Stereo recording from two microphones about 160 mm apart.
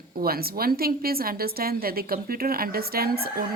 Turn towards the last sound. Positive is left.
turn(degrees=-70)  # may be behind; listen again after turning